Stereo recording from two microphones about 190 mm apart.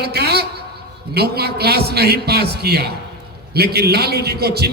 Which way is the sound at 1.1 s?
55° right (ahead or behind).